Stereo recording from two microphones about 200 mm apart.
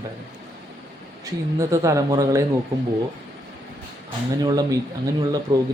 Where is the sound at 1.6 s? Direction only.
15° right (ahead or behind).